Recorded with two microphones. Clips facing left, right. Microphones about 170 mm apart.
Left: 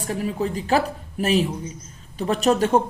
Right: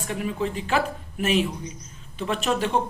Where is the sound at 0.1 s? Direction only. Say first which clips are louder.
Left 2 dB; 35° left (ahead or behind).